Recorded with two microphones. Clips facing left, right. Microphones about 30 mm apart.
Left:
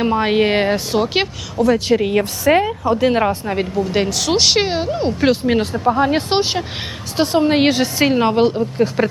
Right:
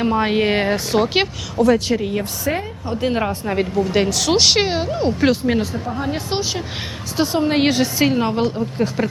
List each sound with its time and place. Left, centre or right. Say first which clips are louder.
0.0 s a woman's voice: left 2 dB; centre
2.0 s a woman's voice: left 5 dB; left
3.1 s a woman's voice: left 1 dB; centre
3.4 s speech: even; centre
5.5 s speech: left 5 dB; left
5.9 s speech: left 12 dB; left
7.2 s a woman's voice: left 3 dB; centre